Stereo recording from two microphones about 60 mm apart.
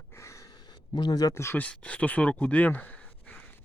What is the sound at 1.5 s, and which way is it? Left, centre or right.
Speech, left.